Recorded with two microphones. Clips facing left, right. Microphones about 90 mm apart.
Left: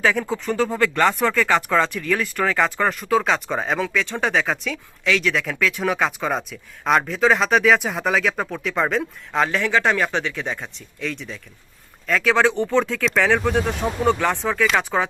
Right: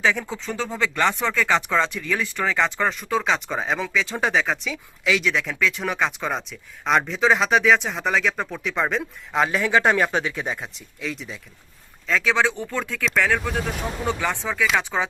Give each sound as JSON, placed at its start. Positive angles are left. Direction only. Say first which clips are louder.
{"t": 0.0, "sound": "speech", "louder": "left 3 dB", "side_deg": 0}
{"t": 9.6, "sound": "speech", "louder": "right 2 dB", "side_deg": -20}
{"t": 12.3, "sound": "speech", "louder": "left 7 dB", "side_deg": 15}
{"t": 13.1, "sound": "speech", "louder": "right 1 dB", "side_deg": 0}
{"t": 14.2, "sound": "speech", "louder": "left 4 dB", "side_deg": 10}
{"t": 14.5, "sound": "speech", "louder": "even", "side_deg": 0}
{"t": 14.8, "sound": "speech", "louder": "left 3 dB", "side_deg": 15}